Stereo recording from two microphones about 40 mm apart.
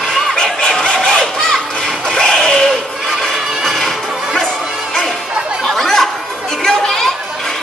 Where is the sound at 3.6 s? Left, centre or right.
Centre.